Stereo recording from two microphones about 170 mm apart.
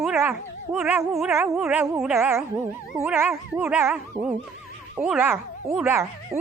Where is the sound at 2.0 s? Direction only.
10° right (ahead or behind).